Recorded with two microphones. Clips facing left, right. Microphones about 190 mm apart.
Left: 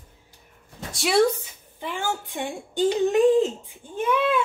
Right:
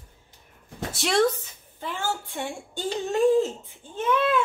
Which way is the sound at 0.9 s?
5° left (ahead or behind).